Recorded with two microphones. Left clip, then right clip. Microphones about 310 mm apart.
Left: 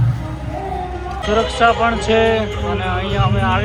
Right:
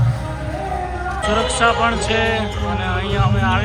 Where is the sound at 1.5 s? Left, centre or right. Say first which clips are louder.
Left 3 dB; centre.